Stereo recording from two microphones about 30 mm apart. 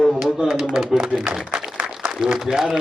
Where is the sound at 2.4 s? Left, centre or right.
Centre.